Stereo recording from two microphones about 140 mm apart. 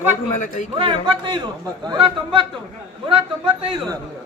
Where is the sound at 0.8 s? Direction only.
35° right (ahead or behind).